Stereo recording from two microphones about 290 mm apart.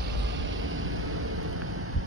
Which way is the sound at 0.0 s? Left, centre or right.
Right.